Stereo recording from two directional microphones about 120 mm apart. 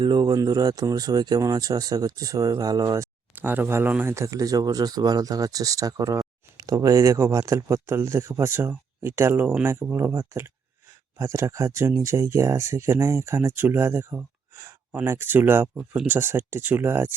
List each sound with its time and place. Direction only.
0.0 s speech: 40° right (ahead or behind)
3.3 s speech: 15° right (ahead or behind)